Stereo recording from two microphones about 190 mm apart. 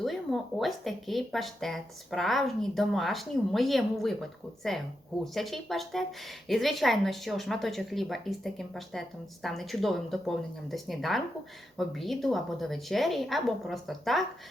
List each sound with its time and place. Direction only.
0.0 s a woman's voice: centre (ahead or behind)